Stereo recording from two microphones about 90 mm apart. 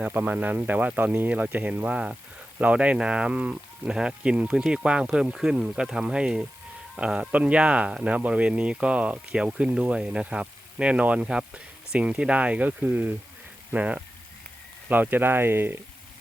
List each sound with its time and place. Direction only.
0.1 s speech: 20° right (ahead or behind)